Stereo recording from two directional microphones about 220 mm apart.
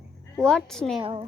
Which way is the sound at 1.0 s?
25° right (ahead or behind).